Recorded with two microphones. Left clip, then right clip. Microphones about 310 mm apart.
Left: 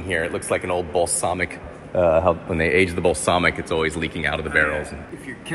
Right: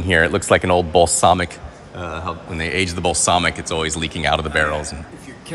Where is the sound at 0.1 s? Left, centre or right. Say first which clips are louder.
Right 8 dB; right.